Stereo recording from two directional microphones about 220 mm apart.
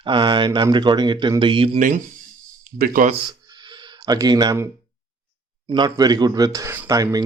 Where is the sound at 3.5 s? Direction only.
20° right (ahead or behind).